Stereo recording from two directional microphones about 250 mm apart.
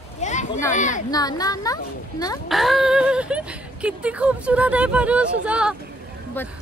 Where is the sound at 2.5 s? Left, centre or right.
Centre.